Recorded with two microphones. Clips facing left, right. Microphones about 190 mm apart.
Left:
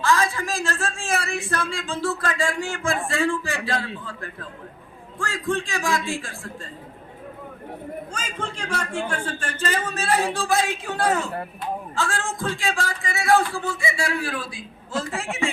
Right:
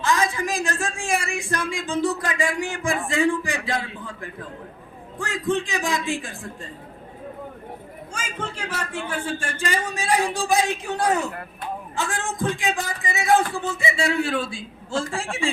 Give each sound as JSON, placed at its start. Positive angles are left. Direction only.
{"t": 0.0, "sound": "a man's voice", "side_deg": -20}
{"t": 8.1, "sound": "a man's voice", "side_deg": -10}